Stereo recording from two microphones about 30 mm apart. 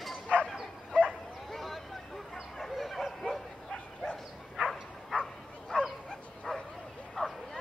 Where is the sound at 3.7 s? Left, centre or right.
Left.